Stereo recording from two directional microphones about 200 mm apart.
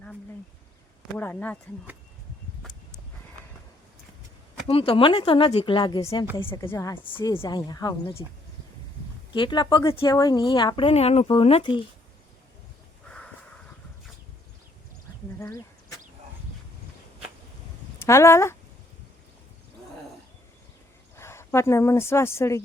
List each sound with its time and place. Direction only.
1.0 s speech: 10° left (ahead or behind)
4.6 s speech: 30° left (ahead or behind)
6.5 s speech: 15° left (ahead or behind)
9.3 s speech: 25° left (ahead or behind)
13.1 s crow: 5° left (ahead or behind)
15.4 s speech: 15° left (ahead or behind)
18.0 s speech: 15° left (ahead or behind)
21.2 s speech: 15° left (ahead or behind)